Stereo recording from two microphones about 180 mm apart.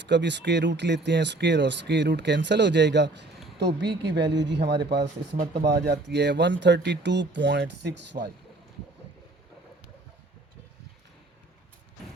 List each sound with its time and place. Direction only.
0.0 s speech: 75° right (ahead or behind)